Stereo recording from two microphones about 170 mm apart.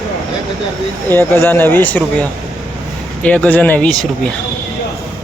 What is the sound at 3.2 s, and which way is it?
Speech, 5° left (ahead or behind).